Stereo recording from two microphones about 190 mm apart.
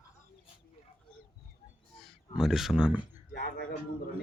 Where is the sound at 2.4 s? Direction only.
Centre (ahead or behind).